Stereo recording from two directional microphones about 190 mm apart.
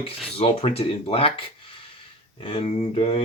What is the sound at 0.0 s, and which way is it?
Speech, 30° left (ahead or behind).